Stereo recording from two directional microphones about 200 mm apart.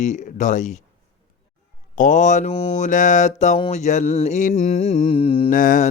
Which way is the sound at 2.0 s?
40° left (ahead or behind).